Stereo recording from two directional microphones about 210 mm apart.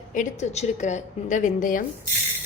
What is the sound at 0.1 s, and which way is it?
A woman's voice, 35° left (ahead or behind).